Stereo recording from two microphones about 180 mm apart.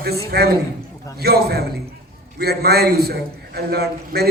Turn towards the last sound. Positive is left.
turn(degrees=-60)  # may be behind; listen again after turning